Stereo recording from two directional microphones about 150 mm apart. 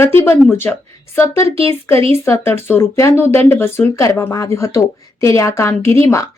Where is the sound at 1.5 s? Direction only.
40° right (ahead or behind).